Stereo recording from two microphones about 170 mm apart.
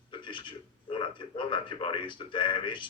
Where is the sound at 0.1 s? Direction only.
30° left (ahead or behind).